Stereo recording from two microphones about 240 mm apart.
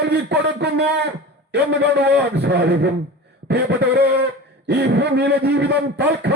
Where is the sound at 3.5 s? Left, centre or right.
Right.